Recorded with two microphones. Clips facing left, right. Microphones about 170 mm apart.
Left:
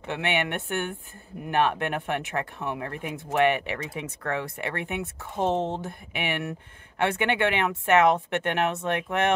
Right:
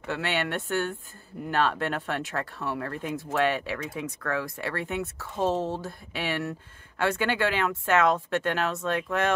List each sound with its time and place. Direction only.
0.0 s speech: 20° left (ahead or behind)